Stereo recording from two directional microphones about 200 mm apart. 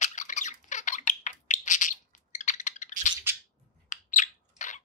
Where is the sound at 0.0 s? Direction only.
40° left (ahead or behind).